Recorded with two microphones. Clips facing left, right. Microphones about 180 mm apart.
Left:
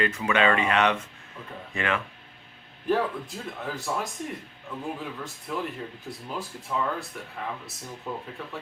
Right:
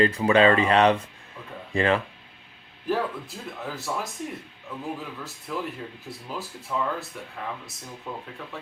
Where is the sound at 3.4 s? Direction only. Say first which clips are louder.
Left 1 dB; centre (ahead or behind).